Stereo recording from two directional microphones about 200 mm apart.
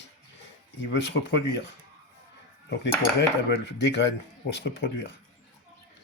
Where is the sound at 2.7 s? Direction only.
60° left (ahead or behind).